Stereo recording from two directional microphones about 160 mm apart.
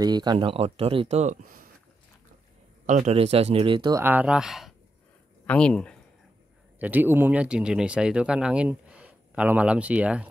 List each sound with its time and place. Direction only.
0.0 s speech: 25° right (ahead or behind); by 1.7 s 60° right (ahead or behind)
2.9 s speech: 45° right (ahead or behind); by 4.0 s 30° right (ahead or behind)
4.0 s speech: 10° right (ahead or behind); by 5.9 s 5° left (ahead or behind)
6.8 s speech: 10° right (ahead or behind)